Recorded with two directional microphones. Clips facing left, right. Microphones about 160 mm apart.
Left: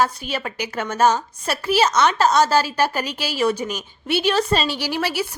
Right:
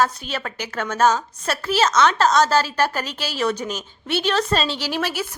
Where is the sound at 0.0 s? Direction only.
10° left (ahead or behind).